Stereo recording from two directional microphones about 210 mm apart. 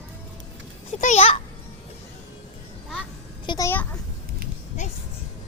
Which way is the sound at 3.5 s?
15° left (ahead or behind).